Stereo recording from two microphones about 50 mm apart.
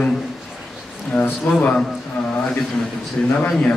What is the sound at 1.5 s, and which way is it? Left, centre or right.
Speech, left.